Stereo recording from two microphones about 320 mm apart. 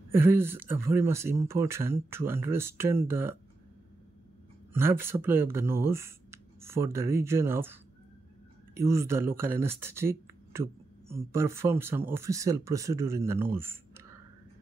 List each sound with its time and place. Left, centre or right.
0.1 s speech: centre
4.7 s speech: centre
8.8 s speech: centre